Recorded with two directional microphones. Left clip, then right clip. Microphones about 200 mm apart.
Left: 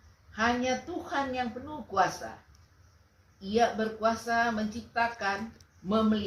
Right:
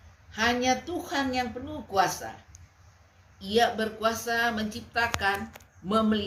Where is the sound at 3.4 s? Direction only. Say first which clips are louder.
Right 2 dB; 20° right (ahead or behind).